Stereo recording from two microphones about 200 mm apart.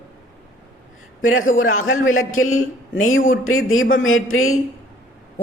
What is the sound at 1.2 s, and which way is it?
A man's voice, 90° left.